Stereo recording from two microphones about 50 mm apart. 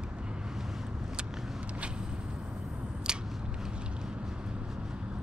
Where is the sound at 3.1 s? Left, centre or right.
Centre.